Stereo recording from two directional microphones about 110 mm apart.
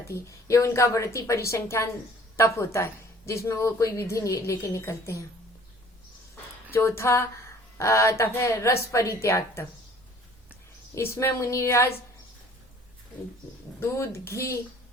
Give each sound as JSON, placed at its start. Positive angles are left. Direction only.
{"t": 0.0, "sound": "speech", "side_deg": 25}
{"t": 6.7, "sound": "speech", "side_deg": 25}
{"t": 10.9, "sound": "speech", "side_deg": 25}
{"t": 13.7, "sound": "speech", "side_deg": 25}